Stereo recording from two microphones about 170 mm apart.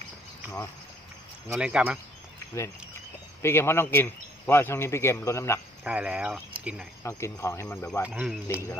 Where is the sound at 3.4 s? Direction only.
15° left (ahead or behind).